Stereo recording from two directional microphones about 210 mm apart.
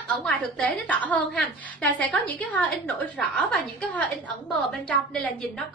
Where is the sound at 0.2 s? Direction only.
5° left (ahead or behind).